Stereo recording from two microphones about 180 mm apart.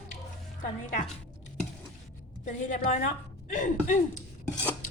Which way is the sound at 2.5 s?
45° left (ahead or behind).